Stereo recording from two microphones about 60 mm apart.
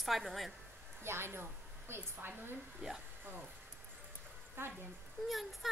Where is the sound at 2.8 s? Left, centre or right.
Centre.